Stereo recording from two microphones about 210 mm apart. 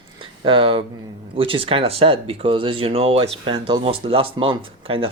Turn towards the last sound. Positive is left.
turn(degrees=-25)  # may be behind; listen again after turning